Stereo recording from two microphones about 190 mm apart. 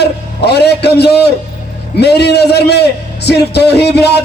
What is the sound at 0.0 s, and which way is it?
A man's voice, 60° left (ahead or behind).